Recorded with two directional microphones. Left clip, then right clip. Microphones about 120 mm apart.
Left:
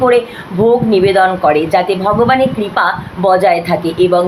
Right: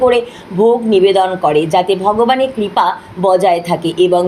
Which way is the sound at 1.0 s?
40° right (ahead or behind).